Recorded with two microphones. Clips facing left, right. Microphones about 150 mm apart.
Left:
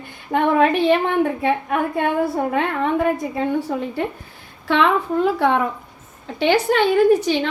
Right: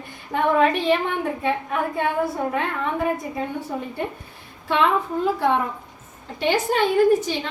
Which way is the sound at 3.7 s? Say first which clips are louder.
Left 4 dB; 85° left.